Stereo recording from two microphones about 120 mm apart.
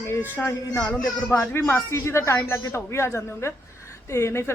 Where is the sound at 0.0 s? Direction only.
20° left (ahead or behind).